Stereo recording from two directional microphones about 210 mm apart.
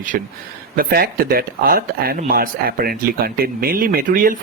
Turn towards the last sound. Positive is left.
turn(degrees=-40)  # may be behind; listen again after turning